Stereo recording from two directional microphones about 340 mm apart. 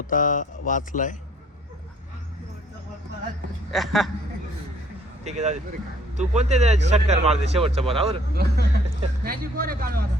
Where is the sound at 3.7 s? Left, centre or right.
Centre.